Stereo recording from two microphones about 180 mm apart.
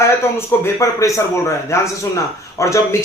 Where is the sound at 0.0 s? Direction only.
15° left (ahead or behind).